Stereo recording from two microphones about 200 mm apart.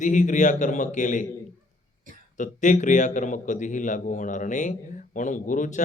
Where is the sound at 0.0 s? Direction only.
40° left (ahead or behind).